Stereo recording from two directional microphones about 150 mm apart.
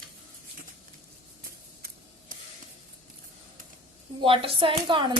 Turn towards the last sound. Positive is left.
turn(degrees=-35)  # may be behind; listen again after turning